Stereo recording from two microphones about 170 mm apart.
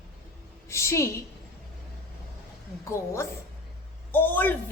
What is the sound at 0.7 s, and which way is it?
Speech, 15° left (ahead or behind).